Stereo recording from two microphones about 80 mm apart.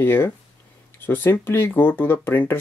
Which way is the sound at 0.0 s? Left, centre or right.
Left.